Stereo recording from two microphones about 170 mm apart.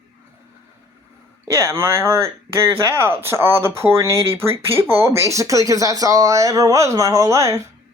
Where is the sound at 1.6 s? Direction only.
15° right (ahead or behind).